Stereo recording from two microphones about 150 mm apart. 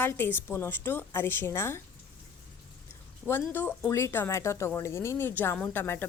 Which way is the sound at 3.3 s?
15° left (ahead or behind).